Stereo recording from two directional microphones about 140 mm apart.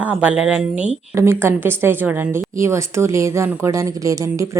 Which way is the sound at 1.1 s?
20° right (ahead or behind).